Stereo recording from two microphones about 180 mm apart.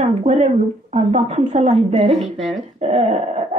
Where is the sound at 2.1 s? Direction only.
Centre (ahead or behind).